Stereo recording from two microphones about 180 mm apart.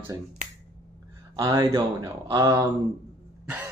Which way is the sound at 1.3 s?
20° right (ahead or behind).